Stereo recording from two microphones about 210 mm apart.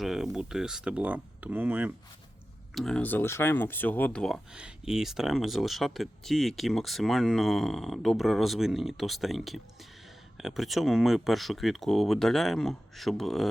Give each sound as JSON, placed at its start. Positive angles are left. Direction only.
{"t": 0.0, "sound": "speech", "side_deg": 0}
{"t": 2.7, "sound": "speech", "side_deg": 5}